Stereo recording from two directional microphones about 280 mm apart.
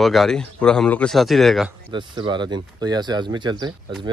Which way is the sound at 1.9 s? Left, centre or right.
Centre.